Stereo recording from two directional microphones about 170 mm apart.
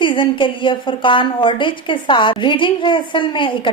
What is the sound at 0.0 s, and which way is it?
A woman's voice, 30° left (ahead or behind).